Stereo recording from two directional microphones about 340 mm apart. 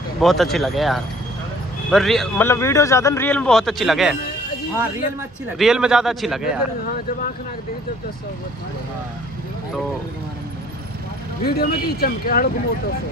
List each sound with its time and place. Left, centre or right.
0.2 s a man's voice: centre
5.6 s a man's voice: centre
11.4 s speech: left